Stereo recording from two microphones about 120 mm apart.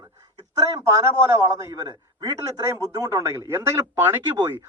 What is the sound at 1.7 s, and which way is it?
A man's voice, 30° right (ahead or behind).